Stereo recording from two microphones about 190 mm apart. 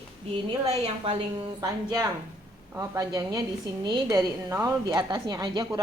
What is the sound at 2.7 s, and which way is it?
A woman's voice, 15° right (ahead or behind).